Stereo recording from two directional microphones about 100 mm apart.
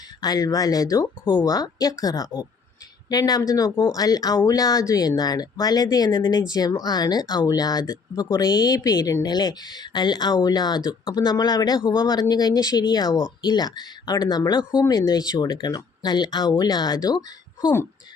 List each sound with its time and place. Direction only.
0.2 s speech: 40° left (ahead or behind)